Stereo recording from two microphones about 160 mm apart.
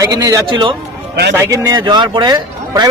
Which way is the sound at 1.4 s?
15° right (ahead or behind).